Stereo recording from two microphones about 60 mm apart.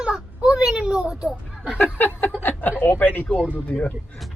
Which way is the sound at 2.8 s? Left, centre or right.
Left.